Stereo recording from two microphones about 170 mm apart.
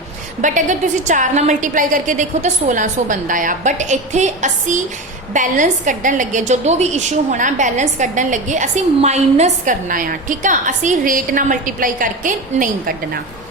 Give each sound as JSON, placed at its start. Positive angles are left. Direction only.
{"t": 0.4, "sound": "a woman's voice", "side_deg": -45}